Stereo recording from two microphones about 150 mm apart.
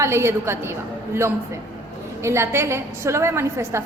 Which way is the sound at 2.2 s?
20° right (ahead or behind).